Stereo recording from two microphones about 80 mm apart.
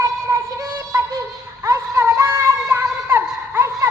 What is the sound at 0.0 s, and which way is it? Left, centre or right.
Synthetic singing, right.